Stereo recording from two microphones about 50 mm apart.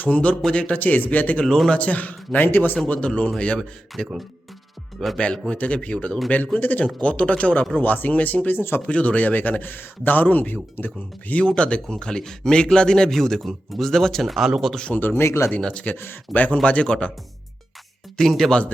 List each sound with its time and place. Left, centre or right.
0.0 s a man's voice: left
0.8 s a man's voice: left
1.5 s speech: centre
1.7 s a man's voice: left
2.5 s speech: left
2.8 s a man's voice: left
11.3 s speech: left; by 14.5 s centre
15.1 s speech: left
15.6 s a man's voice: left
15.9 s speech: left
16.3 s a man's voice: left
16.6 s a man's voice: left
18.2 s speech: centre